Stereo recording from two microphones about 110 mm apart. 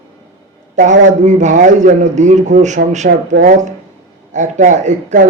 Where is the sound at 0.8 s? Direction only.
90° right.